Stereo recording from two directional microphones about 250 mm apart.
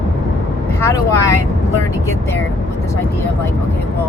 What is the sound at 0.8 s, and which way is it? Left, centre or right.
Speech, centre.